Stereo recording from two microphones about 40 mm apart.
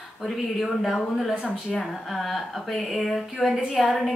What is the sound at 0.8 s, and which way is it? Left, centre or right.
A woman's voice, centre.